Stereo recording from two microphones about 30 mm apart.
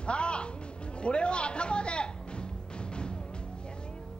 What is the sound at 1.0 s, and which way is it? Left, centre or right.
A man's voice, left.